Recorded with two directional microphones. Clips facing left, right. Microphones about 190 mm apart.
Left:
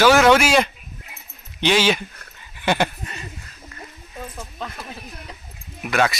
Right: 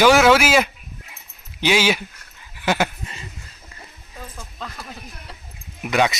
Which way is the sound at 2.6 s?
5° right (ahead or behind).